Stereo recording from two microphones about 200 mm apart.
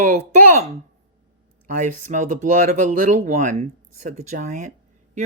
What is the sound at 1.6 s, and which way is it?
Speech, 40° right (ahead or behind).